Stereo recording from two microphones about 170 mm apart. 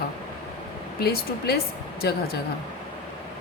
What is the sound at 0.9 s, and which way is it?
A woman's voice, 65° left (ahead or behind).